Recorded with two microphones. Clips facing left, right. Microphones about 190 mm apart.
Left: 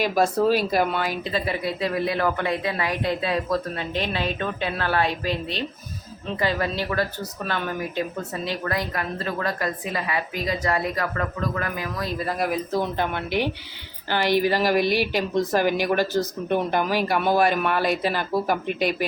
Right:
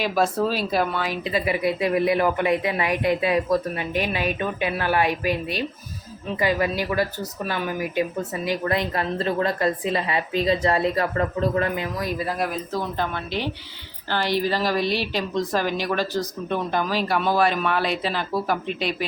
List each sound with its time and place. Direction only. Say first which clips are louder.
0.2 s a man's voice: left 2 dB; 10° left (ahead or behind)
1.2 s speech: right 3 dB; 15° right (ahead or behind)
8.4 s a woman's voice: right 4 dB; 20° right (ahead or behind)
12.7 s a man's voice: left 2 dB; 15° left (ahead or behind)
14.8 s speech: left 2 dB; 50° left (ahead or behind)
15.4 s a man's voice: left 3 dB; 10° left (ahead or behind)
17.8 s speech: left 2 dB; 45° left (ahead or behind)
18.3 s a man's voice: left 1 dB; 15° left (ahead or behind)
18.7 s speech: left 2 dB; 50° left (ahead or behind)